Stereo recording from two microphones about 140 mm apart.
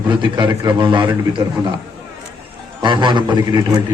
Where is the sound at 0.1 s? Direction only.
35° right (ahead or behind).